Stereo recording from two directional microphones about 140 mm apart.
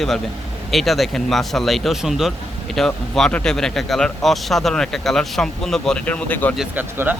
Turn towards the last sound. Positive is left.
turn(degrees=-15)  # may be behind; listen again after turning